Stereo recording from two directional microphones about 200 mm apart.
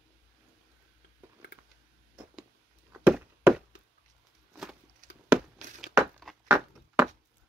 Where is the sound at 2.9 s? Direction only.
5° right (ahead or behind).